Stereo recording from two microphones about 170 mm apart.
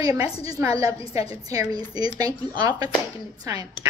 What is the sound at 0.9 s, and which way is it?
Speech, 35° left (ahead or behind).